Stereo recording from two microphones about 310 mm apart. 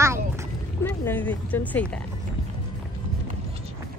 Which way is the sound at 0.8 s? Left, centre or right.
Centre.